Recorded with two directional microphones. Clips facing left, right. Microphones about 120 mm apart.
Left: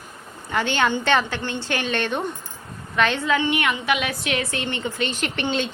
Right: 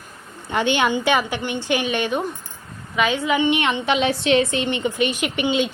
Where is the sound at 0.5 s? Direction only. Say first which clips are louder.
Right 2 dB; 15° right (ahead or behind).